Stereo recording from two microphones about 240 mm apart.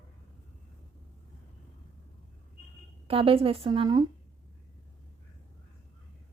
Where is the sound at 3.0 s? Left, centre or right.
Right.